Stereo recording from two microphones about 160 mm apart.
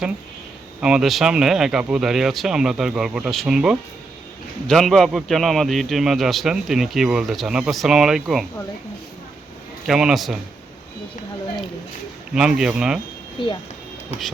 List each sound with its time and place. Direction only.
0.8 s a man's voice: 5° right (ahead or behind)
9.8 s a man's voice: centre (ahead or behind)
12.3 s a man's voice: 5° right (ahead or behind)
13.4 s speech: 35° left (ahead or behind)